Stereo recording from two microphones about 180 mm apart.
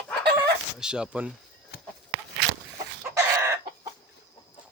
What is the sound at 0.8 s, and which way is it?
Speech, 5° right (ahead or behind).